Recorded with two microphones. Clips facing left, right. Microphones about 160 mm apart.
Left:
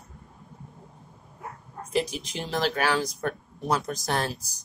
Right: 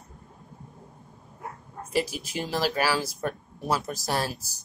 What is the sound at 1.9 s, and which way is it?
A woman's voice, 5° right (ahead or behind).